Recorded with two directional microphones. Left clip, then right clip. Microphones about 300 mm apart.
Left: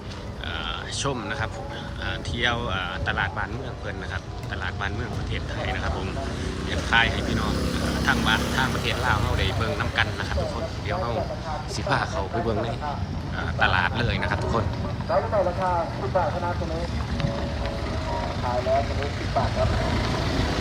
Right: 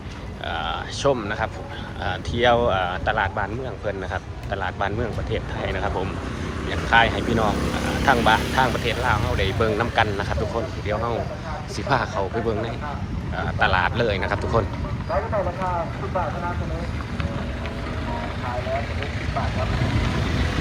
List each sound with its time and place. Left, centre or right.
0.5 s a sound: centre
2.0 s speech: centre
6.9 s speech: centre
11.9 s speech: centre
15.1 s speech: left
18.4 s vehicle: left
19.3 s speech: left